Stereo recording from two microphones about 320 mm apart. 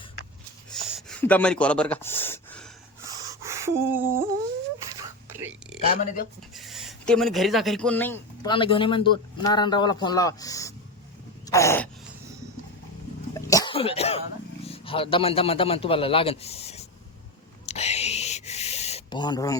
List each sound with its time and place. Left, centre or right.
0.7 s gasp: centre
3.0 s a sound: centre
4.9 s whispering: centre
5.9 s speech: left
6.5 s speech: centre
11.4 s a sound: centre
13.3 s cough: centre
14.6 s a man's voice: centre
17.7 s a sound: centre